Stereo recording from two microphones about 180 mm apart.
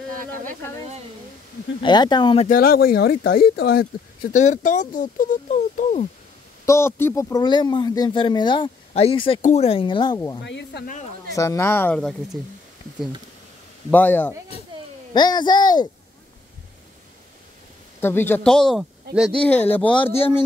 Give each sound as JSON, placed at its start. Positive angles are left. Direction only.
{"t": 1.8, "sound": "speech", "side_deg": 25}
{"t": 2.4, "sound": "speech", "side_deg": 55}
{"t": 6.6, "sound": "speech", "side_deg": 15}
{"t": 10.4, "sound": "speech", "side_deg": 75}
{"t": 11.3, "sound": "speech", "side_deg": 15}
{"t": 13.8, "sound": "speech", "side_deg": 10}
{"t": 15.1, "sound": "speech", "side_deg": 25}
{"t": 18.0, "sound": "speech", "side_deg": 10}